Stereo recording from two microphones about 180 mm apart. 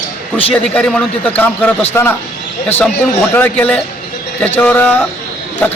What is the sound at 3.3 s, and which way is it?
A man's voice, 10° left (ahead or behind).